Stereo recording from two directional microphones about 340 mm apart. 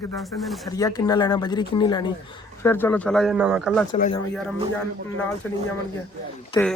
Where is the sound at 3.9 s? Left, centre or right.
Centre.